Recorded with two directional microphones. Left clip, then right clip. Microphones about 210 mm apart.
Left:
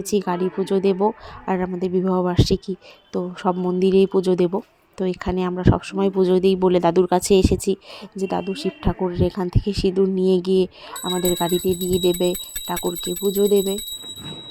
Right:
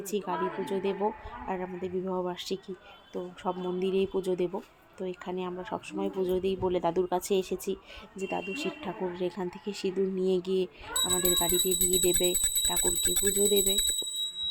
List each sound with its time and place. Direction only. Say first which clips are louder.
0.0 s speech: left 9 dB; 40° left (ahead or behind)
11.0 s speech: left 6 dB; 15° left (ahead or behind)